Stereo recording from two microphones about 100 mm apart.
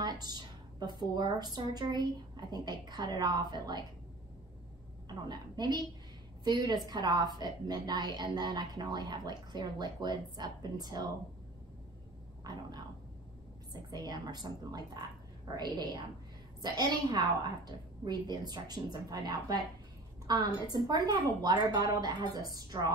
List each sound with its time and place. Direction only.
0.0 s a woman's voice: 40° right (ahead or behind)
5.0 s a woman's voice: 45° right (ahead or behind)
13.7 s a woman's voice: 45° right (ahead or behind)